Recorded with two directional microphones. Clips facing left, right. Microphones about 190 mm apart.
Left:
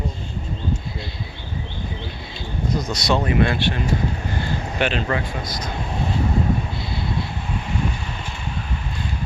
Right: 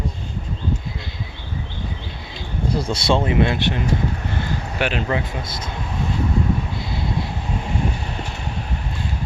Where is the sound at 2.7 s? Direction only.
30° right (ahead or behind).